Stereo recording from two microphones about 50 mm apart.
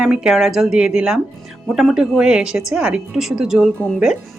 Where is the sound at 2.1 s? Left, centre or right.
Centre.